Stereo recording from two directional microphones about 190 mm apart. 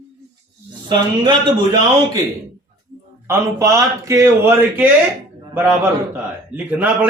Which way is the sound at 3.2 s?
15° right (ahead or behind).